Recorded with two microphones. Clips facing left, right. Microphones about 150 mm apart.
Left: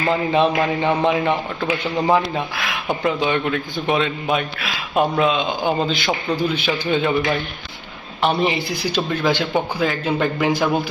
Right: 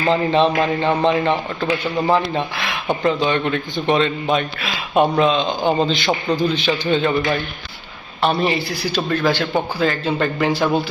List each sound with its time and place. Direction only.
0.3 s a man's voice: 10° left (ahead or behind)
2.3 s speech: centre (ahead or behind)
8.2 s a man's voice: 15° left (ahead or behind)
9.8 s a man's voice: 5° left (ahead or behind)